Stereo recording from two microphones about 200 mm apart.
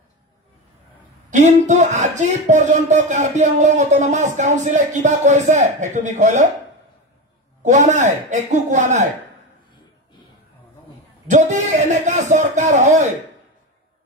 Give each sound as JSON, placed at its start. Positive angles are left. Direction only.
{"t": 1.3, "sound": "speech", "side_deg": -35}
{"t": 7.6, "sound": "speech", "side_deg": -35}
{"t": 11.2, "sound": "speech", "side_deg": -35}